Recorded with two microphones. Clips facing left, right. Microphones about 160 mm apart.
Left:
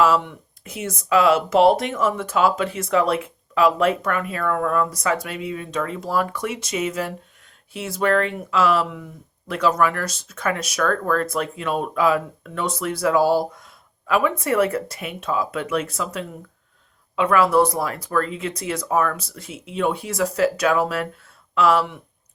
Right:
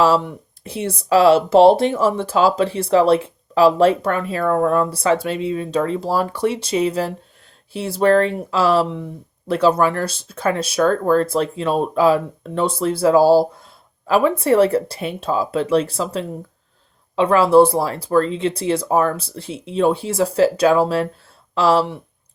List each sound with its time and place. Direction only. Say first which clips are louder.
0.0 s speech: right 2 dB; 35° right (ahead or behind)